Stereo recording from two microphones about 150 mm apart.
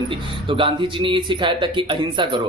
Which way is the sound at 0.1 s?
35° right (ahead or behind).